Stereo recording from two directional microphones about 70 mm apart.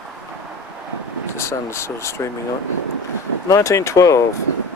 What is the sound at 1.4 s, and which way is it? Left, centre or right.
Speech, left.